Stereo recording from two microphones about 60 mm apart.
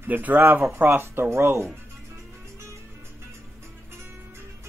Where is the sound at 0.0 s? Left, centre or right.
Right.